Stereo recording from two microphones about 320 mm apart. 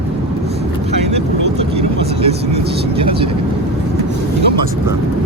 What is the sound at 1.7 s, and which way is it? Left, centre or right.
Vehicle, centre.